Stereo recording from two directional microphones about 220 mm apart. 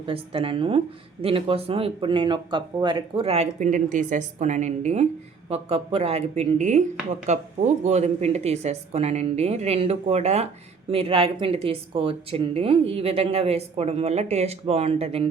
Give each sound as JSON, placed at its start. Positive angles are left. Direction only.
{"t": 0.0, "sound": "speech", "side_deg": -25}